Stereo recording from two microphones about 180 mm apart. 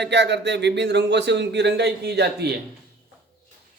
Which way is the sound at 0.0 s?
75° right (ahead or behind).